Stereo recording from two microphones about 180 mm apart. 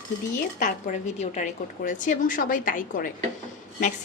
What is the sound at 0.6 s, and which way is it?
A woman's voice, 45° left (ahead or behind).